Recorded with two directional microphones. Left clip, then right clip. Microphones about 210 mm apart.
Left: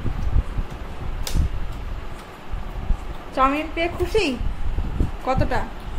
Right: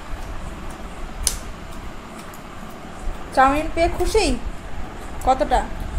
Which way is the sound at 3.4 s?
10° left (ahead or behind).